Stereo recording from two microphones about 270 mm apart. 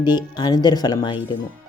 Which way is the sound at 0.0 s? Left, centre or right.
Centre.